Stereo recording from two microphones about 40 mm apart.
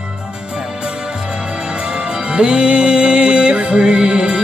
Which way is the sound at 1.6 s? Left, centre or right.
Right.